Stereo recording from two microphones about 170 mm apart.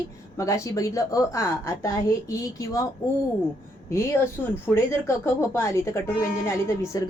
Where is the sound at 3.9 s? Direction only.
15° left (ahead or behind).